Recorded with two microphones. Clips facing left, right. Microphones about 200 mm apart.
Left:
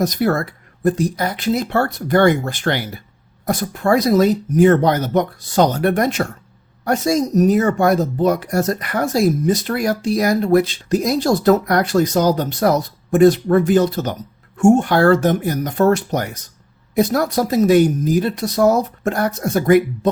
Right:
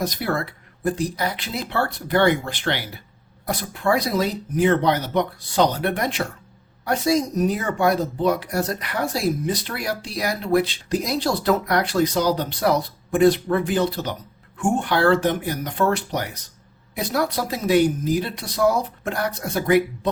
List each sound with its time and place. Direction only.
0.0 s speech: 45° left (ahead or behind)